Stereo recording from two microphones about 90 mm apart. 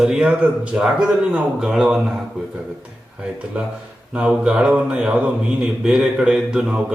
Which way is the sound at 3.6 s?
15° right (ahead or behind).